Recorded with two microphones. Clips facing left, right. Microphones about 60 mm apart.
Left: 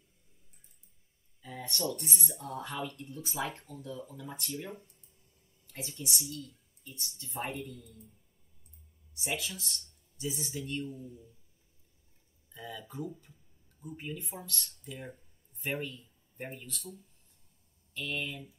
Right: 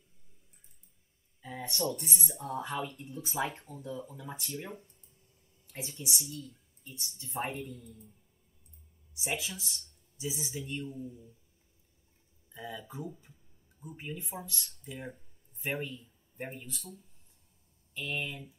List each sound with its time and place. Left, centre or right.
1.4 s a sound: centre
1.7 s speech: centre
2.4 s speech: centre
7.4 s speech: centre
9.2 s speech: centre
12.5 s speech: centre